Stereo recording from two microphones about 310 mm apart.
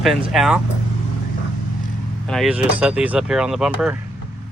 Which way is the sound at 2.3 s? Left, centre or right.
Centre.